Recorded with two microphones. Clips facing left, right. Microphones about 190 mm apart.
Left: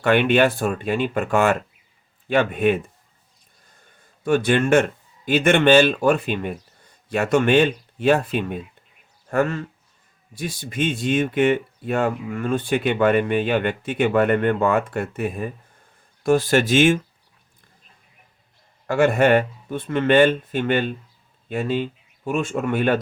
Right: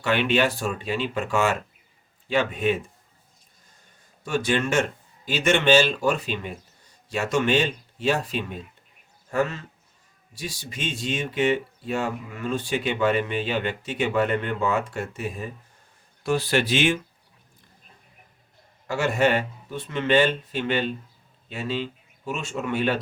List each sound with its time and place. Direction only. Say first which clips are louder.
0.0 s speech: left 5 dB; 55° left (ahead or behind)
4.2 s speech: left 6 dB; 55° left (ahead or behind)
18.9 s speech: left 6 dB; 55° left (ahead or behind)